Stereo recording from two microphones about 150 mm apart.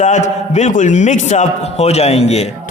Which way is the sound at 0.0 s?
50° left (ahead or behind).